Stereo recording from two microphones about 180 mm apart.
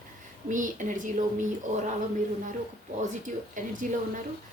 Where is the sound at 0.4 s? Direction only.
45° right (ahead or behind).